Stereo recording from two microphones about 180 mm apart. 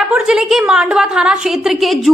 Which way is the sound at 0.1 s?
5° right (ahead or behind).